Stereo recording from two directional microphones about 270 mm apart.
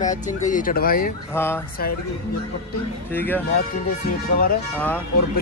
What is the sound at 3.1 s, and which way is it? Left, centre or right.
Speech, centre.